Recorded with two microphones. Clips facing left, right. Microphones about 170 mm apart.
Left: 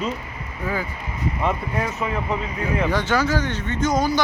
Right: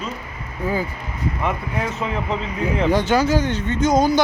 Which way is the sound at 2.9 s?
15° right (ahead or behind).